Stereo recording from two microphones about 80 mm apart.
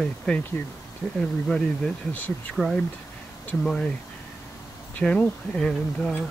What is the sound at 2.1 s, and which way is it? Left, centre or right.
Speech, centre.